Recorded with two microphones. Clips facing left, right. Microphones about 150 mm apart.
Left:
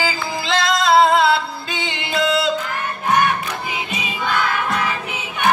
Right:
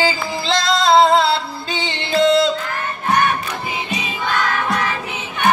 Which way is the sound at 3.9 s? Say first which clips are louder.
Even; 10° left (ahead or behind).